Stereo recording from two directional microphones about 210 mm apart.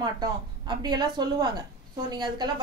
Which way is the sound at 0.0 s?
20° right (ahead or behind).